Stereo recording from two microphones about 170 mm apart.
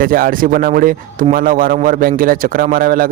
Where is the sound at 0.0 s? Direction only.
55° right (ahead or behind).